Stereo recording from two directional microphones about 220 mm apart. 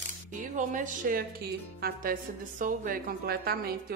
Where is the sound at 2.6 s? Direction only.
40° right (ahead or behind).